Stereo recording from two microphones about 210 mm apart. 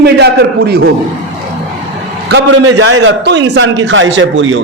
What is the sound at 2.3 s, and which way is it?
A man's voice, 65° right (ahead or behind).